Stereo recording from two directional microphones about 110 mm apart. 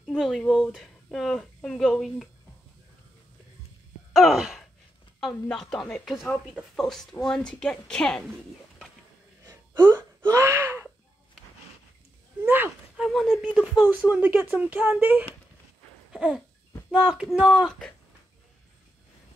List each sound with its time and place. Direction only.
0.0 s a woman's voice: 5° left (ahead or behind)
4.1 s sigh: centre (ahead or behind)
5.2 s a woman's voice: 5° left (ahead or behind)
9.5 s gasp: 25° right (ahead or behind)
12.4 s a sound: 15° right (ahead or behind)
12.9 s a sound: centre (ahead or behind)
13.6 s speech: 5° right (ahead or behind)
14.2 s speech: 15° right (ahead or behind)
16.1 s a sound: 5° right (ahead or behind)
17.0 s a woman's voice: 5° right (ahead or behind)